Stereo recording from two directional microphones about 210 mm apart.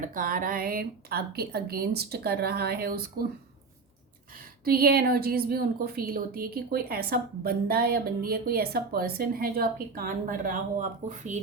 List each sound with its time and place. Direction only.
0.0 s a woman's voice: 40° right (ahead or behind)
4.6 s a woman's voice: 45° right (ahead or behind)